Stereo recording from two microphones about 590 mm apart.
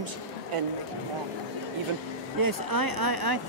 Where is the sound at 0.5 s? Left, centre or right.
Right.